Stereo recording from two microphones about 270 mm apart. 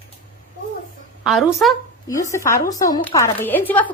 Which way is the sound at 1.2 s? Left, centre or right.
Centre.